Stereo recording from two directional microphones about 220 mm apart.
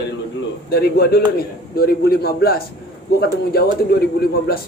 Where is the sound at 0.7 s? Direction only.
45° left (ahead or behind).